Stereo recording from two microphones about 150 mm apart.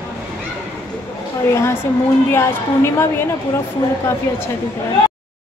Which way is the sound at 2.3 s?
15° left (ahead or behind).